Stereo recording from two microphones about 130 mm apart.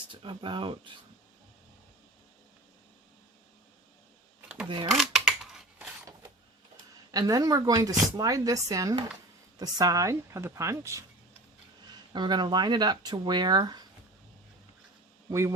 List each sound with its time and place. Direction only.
0.1 s speech: 40° right (ahead or behind)
4.4 s a sound: 10° right (ahead or behind)
4.9 s scissors: 5° right (ahead or behind)
7.1 s speech: 30° right (ahead or behind)
12.1 s speech: 35° right (ahead or behind)
15.3 s speech: 25° right (ahead or behind)